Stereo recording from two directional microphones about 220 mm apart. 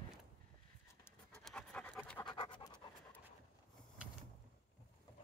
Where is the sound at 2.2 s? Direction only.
20° left (ahead or behind).